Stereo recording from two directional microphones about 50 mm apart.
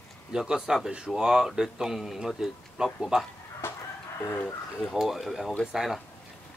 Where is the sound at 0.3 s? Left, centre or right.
Centre.